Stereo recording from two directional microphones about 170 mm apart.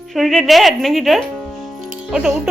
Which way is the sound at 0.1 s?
Centre (ahead or behind).